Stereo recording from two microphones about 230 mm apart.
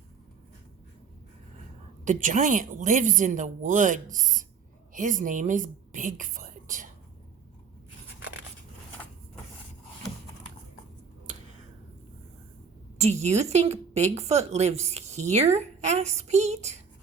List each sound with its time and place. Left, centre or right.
2.0 s a woman's voice: right
13.0 s a woman's voice: right